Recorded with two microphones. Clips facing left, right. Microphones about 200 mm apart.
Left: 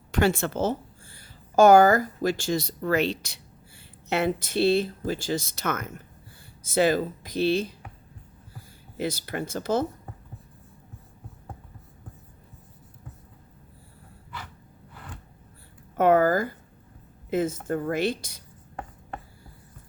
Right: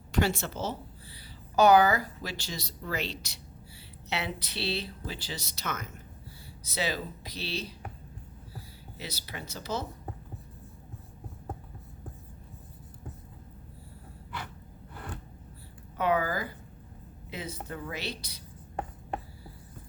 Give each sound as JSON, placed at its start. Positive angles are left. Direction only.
{"t": 0.1, "sound": "a woman's voice", "side_deg": 55}
{"t": 9.0, "sound": "speech", "side_deg": 50}
{"t": 16.0, "sound": "a sound", "side_deg": 50}
{"t": 17.2, "sound": "speech", "side_deg": 50}